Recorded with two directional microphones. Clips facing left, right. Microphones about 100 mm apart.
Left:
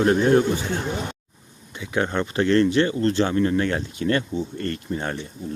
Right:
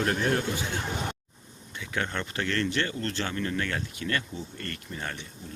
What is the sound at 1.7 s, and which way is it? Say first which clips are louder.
Speech: left 8 dB; 20° left (ahead or behind).